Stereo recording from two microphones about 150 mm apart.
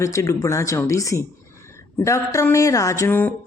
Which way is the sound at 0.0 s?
20° left (ahead or behind).